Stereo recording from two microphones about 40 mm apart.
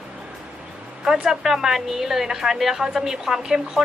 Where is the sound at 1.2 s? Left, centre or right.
Centre.